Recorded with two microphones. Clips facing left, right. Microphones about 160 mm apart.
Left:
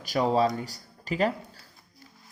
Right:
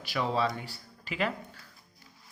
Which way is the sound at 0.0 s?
40° left (ahead or behind).